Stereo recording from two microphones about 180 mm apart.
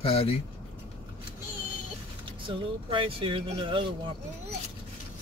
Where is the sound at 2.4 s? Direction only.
30° right (ahead or behind).